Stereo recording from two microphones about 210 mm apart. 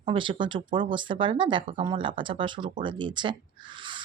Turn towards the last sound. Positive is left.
turn(degrees=-20)  # may be behind; listen again after turning